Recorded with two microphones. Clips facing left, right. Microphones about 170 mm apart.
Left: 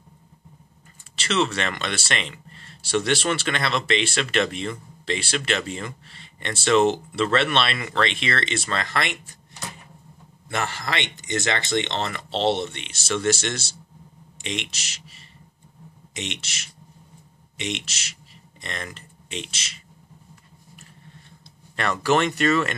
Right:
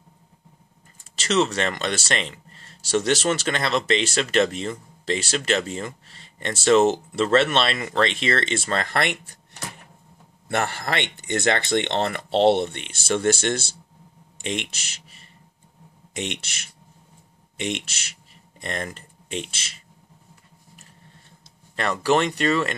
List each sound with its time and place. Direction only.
1.1 s speech: 45° right (ahead or behind); by 9.4 s 60° right (ahead or behind)
10.5 s speech: 55° right (ahead or behind)
16.1 s speech: 55° right (ahead or behind)
17.6 s speech: 55° right (ahead or behind)
22.0 s speech: 35° right (ahead or behind)